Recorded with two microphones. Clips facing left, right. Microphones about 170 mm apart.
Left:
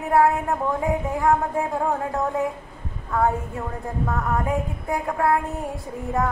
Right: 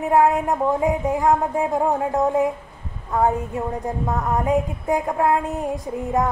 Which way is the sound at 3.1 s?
15° right (ahead or behind).